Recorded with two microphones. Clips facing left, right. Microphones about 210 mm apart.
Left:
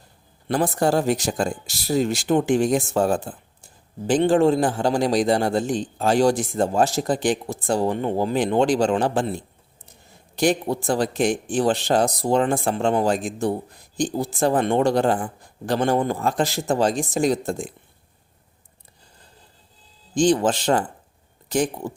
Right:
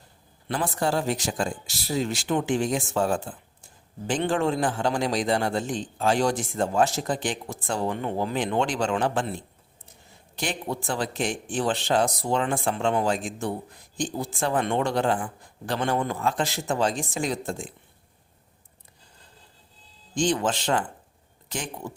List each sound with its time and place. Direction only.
0.4 s speech: 40° left (ahead or behind)
20.1 s speech: 35° left (ahead or behind)